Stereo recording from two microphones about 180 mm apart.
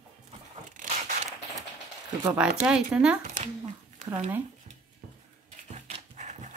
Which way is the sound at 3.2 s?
40° right (ahead or behind).